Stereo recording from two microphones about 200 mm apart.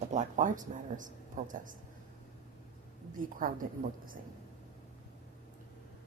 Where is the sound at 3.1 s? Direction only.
45° right (ahead or behind).